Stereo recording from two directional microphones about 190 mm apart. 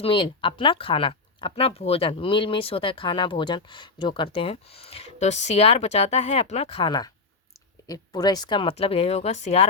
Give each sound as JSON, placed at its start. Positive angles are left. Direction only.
{"t": 0.0, "sound": "speech", "side_deg": 25}